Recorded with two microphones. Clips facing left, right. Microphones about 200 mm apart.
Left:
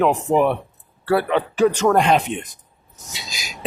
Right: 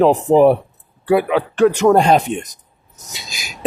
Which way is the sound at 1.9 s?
35° right (ahead or behind).